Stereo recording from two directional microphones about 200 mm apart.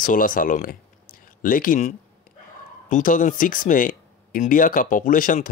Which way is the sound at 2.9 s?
40° left (ahead or behind).